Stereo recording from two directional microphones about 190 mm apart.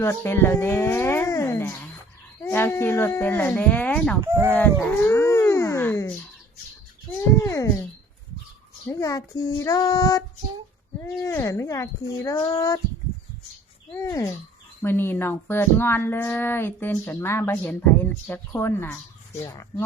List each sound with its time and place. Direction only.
0.0 s speech: 15° left (ahead or behind)
4.2 s speech: 15° right (ahead or behind)
4.5 s dog: 10° left (ahead or behind)
7.2 s speech: 15° left (ahead or behind)
8.9 s speech: 15° left (ahead or behind)
13.9 s speech: 15° left (ahead or behind)